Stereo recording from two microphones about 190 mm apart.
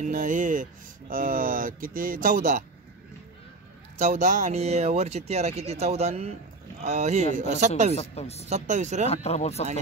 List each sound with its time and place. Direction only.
0.0 s speech: 45° right (ahead or behind)
4.0 s speech: 45° right (ahead or behind)
7.9 s speech: 35° left (ahead or behind)
8.5 s speech: 40° right (ahead or behind)
9.1 s speech: 35° left (ahead or behind)